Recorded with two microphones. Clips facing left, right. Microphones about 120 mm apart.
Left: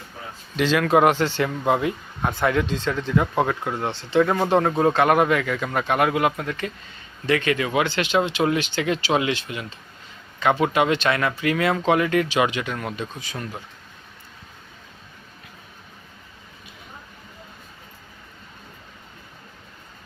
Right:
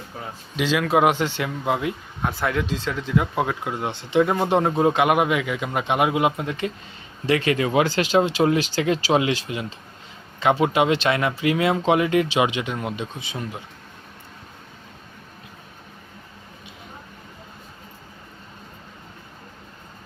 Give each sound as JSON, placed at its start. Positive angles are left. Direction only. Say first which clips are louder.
{"t": 0.5, "sound": "speech", "louder": "left 2 dB", "side_deg": -5}